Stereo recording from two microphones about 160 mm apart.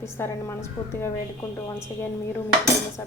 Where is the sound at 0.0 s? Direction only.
15° left (ahead or behind).